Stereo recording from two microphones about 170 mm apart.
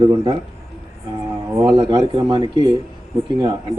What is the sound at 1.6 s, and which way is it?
Speech, 25° right (ahead or behind).